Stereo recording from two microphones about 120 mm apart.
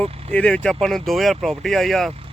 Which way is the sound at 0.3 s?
10° left (ahead or behind).